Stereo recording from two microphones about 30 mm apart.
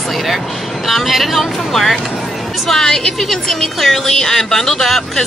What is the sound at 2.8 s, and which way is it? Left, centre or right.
Speech, left.